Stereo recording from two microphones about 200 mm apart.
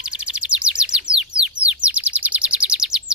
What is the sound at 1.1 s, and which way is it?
Bird, 5° right (ahead or behind).